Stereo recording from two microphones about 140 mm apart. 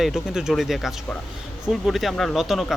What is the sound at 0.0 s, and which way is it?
Speech, centre (ahead or behind).